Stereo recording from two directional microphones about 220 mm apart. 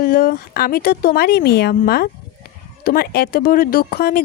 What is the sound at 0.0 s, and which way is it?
Speech, 40° left (ahead or behind).